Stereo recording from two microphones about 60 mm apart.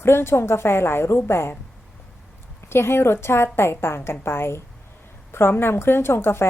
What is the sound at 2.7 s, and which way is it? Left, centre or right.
A woman's voice, left.